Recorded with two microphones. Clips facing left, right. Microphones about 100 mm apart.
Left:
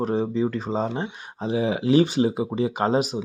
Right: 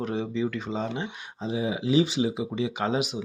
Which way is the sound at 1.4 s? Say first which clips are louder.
Left 5 dB; 65° left (ahead or behind).